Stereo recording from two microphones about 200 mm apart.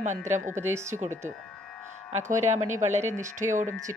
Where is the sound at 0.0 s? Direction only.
35° right (ahead or behind).